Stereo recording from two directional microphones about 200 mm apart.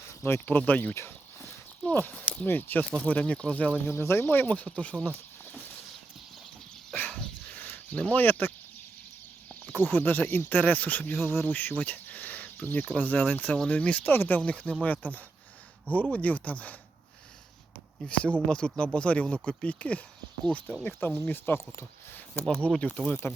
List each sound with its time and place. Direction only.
0.0 s speech: 15° left (ahead or behind)
6.9 s a sound: 5° left (ahead or behind)
9.5 s speech: 10° left (ahead or behind)
18.0 s speech: 5° left (ahead or behind)